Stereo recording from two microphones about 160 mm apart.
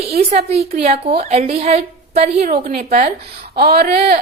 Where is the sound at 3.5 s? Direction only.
75° right (ahead or behind).